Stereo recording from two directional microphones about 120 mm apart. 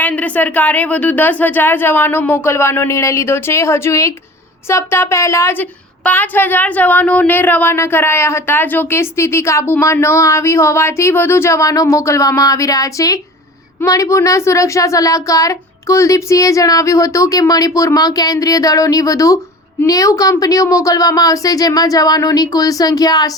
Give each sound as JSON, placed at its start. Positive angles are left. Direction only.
{"t": 0.0, "sound": "a woman's voice", "side_deg": 10}